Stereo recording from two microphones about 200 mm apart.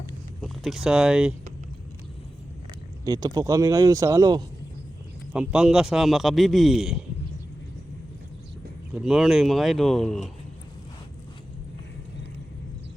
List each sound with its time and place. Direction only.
0.4 s speech: centre (ahead or behind)
3.0 s speech: 20° right (ahead or behind)
5.3 s speech: 5° right (ahead or behind)
9.0 s speech: 5° right (ahead or behind)